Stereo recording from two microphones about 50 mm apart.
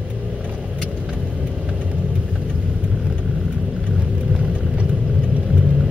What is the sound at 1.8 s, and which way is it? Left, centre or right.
Vehicle, right.